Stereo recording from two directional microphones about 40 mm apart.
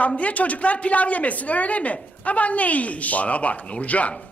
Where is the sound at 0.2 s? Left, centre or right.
Left.